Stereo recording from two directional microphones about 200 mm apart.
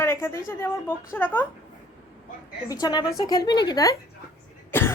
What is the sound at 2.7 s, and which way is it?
A woman's voice, 20° left (ahead or behind).